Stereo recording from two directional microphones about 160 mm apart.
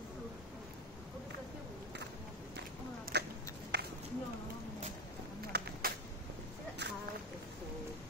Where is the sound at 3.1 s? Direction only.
90° right.